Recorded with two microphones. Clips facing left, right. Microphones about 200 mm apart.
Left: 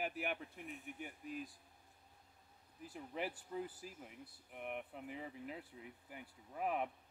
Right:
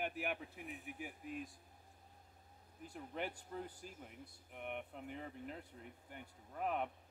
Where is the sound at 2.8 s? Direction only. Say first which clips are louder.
Even; 5° left (ahead or behind).